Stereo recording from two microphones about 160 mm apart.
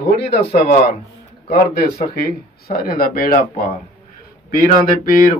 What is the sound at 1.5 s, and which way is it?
Speech, 75° left (ahead or behind).